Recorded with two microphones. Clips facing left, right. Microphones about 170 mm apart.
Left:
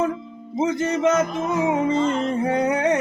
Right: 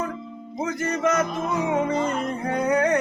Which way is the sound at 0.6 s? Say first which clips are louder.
Left 4 dB; 25° left (ahead or behind).